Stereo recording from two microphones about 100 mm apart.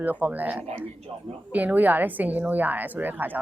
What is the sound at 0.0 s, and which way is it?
A woman's voice, 15° right (ahead or behind).